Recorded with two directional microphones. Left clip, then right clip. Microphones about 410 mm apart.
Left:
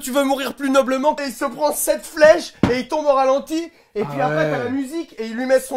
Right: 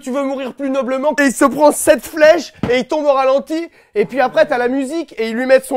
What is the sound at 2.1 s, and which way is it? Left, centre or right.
Speech, right.